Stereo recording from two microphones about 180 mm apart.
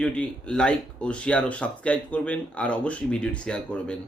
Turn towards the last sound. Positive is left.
turn(degrees=5)  # may be behind; listen again after turning